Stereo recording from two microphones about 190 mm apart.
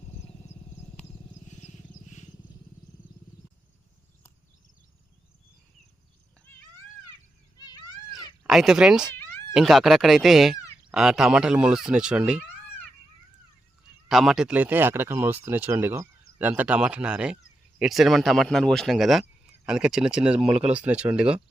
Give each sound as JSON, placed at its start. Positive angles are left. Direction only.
{"t": 7.6, "sound": "a sound", "side_deg": 20}
{"t": 8.4, "sound": "speech", "side_deg": 0}
{"t": 14.1, "sound": "speech", "side_deg": 0}